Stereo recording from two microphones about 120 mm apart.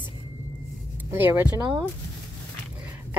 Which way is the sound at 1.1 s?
20° right (ahead or behind).